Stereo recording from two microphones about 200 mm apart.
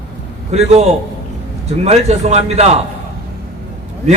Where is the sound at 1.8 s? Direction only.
35° right (ahead or behind).